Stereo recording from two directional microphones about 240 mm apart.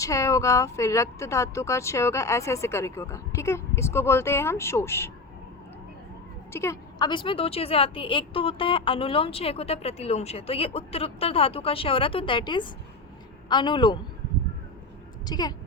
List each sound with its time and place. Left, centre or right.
0.0 s speech: centre
6.5 s a woman's voice: centre
15.3 s speech: centre